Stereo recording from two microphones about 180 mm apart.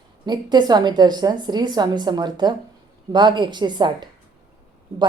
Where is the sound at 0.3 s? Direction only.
25° right (ahead or behind).